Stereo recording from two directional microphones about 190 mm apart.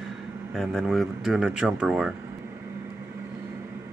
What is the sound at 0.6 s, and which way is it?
Speech, centre (ahead or behind).